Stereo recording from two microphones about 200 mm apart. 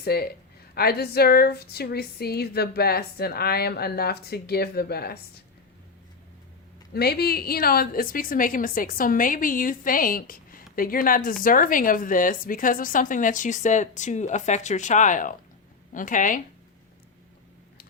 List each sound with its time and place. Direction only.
0.0 s speech: 50° left (ahead or behind)
6.9 s a woman's voice: 50° left (ahead or behind)